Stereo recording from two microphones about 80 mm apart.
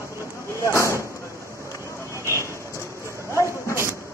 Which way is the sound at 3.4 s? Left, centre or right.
Right.